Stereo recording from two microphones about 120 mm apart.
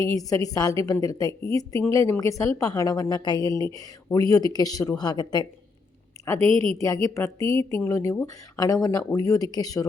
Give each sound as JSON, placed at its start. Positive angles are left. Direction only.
{"t": 0.1, "sound": "a woman's voice", "side_deg": 30}
{"t": 6.2, "sound": "a woman's voice", "side_deg": 25}